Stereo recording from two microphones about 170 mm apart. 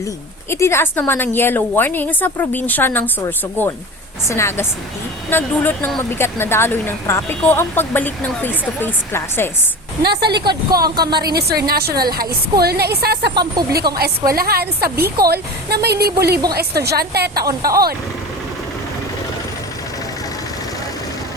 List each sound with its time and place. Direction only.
0.5 s speech: 15° left (ahead or behind)
10.0 s a woman's voice: 75° right (ahead or behind)
10.7 s a woman's voice: 65° right (ahead or behind)
11.0 s speech: 25° right (ahead or behind)
11.3 s a woman's voice: 70° right (ahead or behind)
13.3 s speech: 25° right (ahead or behind)
13.9 s a woman's voice: 60° right (ahead or behind)